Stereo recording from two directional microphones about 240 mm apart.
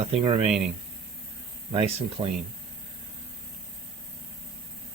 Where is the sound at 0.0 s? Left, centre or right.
Right.